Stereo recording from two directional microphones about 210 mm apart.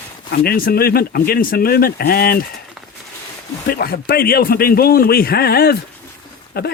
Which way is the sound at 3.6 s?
45° left (ahead or behind).